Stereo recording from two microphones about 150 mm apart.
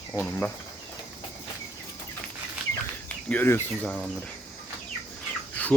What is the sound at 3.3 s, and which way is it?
Speech, 15° left (ahead or behind).